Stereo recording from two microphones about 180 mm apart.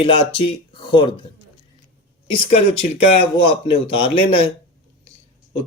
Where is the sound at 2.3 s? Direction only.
35° left (ahead or behind).